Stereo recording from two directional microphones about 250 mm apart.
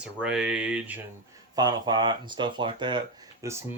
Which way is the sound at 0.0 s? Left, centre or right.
Centre.